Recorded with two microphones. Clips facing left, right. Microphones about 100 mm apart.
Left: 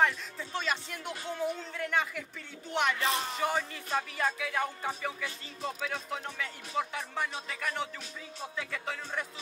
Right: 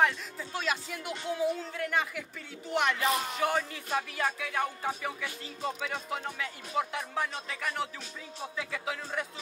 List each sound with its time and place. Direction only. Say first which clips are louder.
0.0 s speech: right 1 dB; centre (ahead or behind)